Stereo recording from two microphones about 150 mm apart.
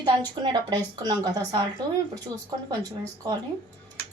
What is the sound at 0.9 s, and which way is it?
Speech, 25° right (ahead or behind).